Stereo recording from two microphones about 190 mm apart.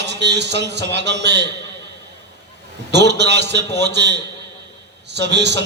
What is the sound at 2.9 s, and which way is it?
A man's voice, 65° right (ahead or behind).